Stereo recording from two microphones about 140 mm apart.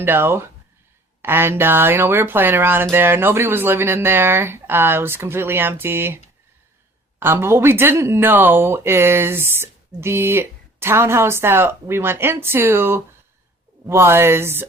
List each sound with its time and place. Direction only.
0.0 s speech: 15° right (ahead or behind)
7.2 s speech: 15° right (ahead or behind)